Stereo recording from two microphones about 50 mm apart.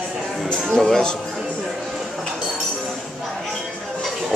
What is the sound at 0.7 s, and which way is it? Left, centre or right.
Speech, centre.